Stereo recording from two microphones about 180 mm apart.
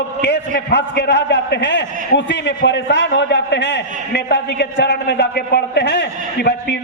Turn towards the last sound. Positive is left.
turn(degrees=70)  # may be behind; listen again after turning